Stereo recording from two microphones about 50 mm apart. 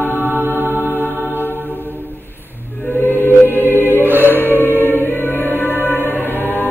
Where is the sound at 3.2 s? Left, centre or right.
Left.